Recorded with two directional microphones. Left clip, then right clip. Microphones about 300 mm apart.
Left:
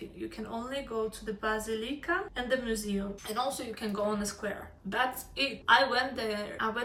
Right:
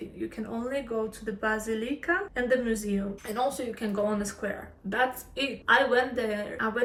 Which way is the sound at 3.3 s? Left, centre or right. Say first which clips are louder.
Right 4 dB; centre.